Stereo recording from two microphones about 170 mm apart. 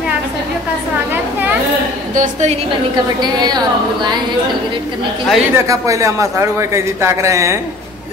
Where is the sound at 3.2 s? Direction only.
25° right (ahead or behind).